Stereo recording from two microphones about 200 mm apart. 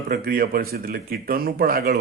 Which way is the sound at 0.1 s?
45° right (ahead or behind).